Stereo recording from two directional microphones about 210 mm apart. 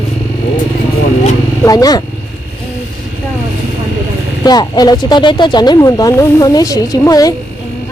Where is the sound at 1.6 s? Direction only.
15° left (ahead or behind).